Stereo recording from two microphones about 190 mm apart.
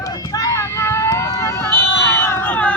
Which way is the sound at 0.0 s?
20° left (ahead or behind).